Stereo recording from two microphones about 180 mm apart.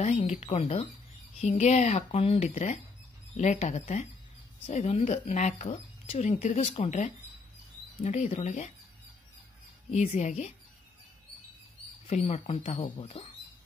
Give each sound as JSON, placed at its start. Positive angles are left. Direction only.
{"t": 0.3, "sound": "speech", "side_deg": 35}
{"t": 9.8, "sound": "speech", "side_deg": 40}
{"t": 12.1, "sound": "speech", "side_deg": 35}